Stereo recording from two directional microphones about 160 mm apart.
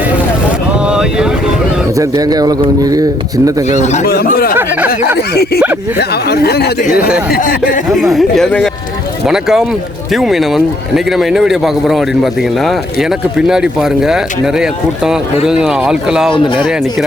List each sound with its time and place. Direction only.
0.9 s boat: 5° right (ahead or behind)
2.0 s a man's voice: 25° right (ahead or behind)
3.7 s speech: 45° left (ahead or behind)
4.0 s speech: 75° left (ahead or behind)
5.1 s speech: 85° left
7.3 s speech: 65° left (ahead or behind)
8.1 s a man's voice: 5° left (ahead or behind)
16.3 s speech: 30° left (ahead or behind)